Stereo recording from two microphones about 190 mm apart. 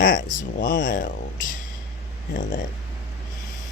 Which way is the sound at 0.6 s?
70° left (ahead or behind).